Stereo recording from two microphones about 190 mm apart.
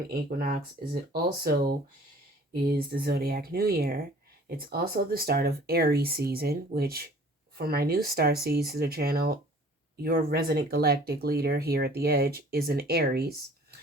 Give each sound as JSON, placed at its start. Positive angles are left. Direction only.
{"t": 0.1, "sound": "speech", "side_deg": -50}